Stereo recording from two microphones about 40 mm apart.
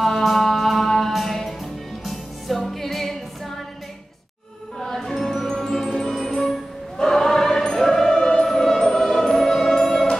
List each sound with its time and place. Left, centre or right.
0.0 s music: centre
4.7 s music: centre